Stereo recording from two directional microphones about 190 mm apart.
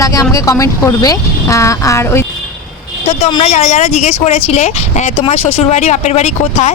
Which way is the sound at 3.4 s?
35° left (ahead or behind).